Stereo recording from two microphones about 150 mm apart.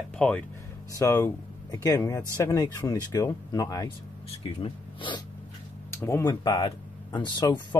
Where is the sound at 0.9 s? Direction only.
20° left (ahead or behind).